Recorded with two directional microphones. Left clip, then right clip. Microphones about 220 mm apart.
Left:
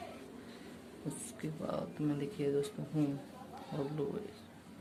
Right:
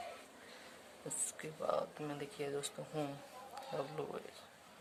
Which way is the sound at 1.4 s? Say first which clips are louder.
Right 2 dB; 25° right (ahead or behind).